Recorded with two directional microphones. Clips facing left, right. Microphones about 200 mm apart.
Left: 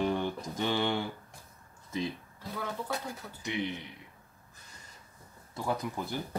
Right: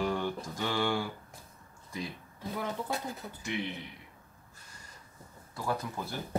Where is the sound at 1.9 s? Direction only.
25° left (ahead or behind).